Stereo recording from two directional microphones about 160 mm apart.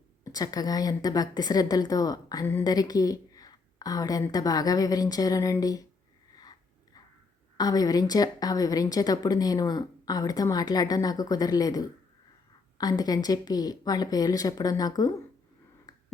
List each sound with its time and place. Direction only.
0.3 s a woman's voice: 25° left (ahead or behind)
7.5 s a woman's voice: 25° left (ahead or behind)